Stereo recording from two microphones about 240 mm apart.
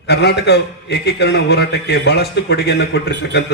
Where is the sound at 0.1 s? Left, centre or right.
Left.